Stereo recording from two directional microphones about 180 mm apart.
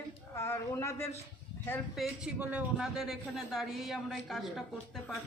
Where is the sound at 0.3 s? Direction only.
15° left (ahead or behind).